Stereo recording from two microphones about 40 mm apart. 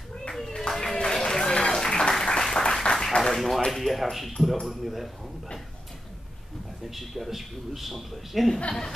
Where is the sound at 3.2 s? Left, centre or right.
Left.